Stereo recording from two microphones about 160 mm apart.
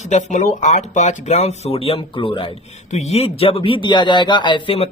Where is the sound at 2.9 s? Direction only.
45° left (ahead or behind).